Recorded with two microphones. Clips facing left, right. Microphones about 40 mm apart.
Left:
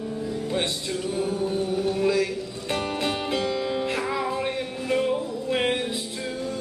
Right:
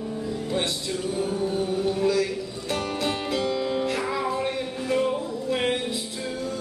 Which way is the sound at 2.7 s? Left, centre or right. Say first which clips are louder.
Left 1 dB; left.